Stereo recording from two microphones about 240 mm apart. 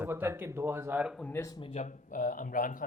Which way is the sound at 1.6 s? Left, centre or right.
Left.